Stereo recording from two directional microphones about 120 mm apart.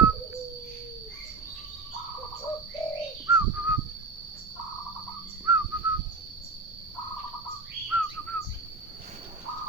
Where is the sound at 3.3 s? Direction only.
15° right (ahead or behind).